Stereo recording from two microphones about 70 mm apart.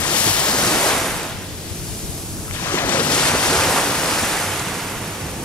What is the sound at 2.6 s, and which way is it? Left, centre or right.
Waves, left.